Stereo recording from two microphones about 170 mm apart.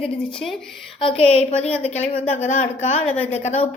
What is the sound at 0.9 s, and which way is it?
A woman's voice, 35° left (ahead or behind).